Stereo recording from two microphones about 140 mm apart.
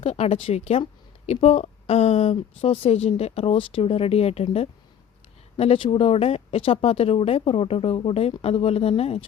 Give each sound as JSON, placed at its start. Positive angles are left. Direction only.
{"t": 0.0, "sound": "a woman's voice", "side_deg": 45}